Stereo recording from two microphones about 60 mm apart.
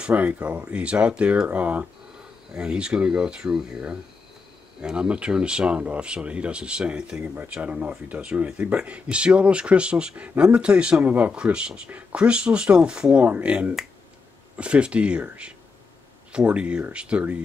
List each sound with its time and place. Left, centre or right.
0.1 s speech: right